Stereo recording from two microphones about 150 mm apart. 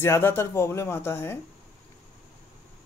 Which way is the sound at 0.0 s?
15° left (ahead or behind).